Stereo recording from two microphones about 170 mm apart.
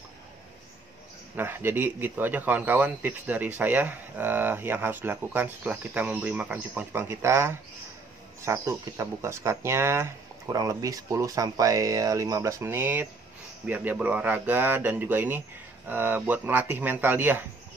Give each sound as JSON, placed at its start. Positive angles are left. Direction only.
{"t": 1.3, "sound": "speech", "side_deg": -10}